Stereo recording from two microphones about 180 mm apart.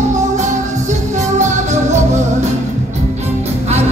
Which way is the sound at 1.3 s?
40° right (ahead or behind).